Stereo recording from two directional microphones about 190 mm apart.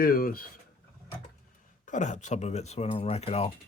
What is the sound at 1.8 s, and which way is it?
Speech, 40° left (ahead or behind).